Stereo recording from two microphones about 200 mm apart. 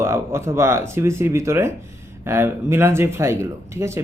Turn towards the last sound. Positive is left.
turn(degrees=-15)  # may be behind; listen again after turning